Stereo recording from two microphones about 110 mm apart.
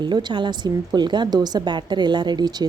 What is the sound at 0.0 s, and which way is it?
A woman's voice, 45° right (ahead or behind).